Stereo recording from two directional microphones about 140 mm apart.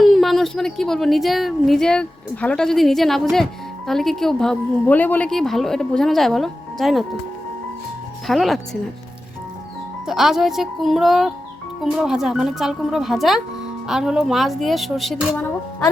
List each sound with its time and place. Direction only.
0.0 s a woman's voice: centre (ahead or behind)
8.3 s speech: centre (ahead or behind)
10.1 s speech: centre (ahead or behind)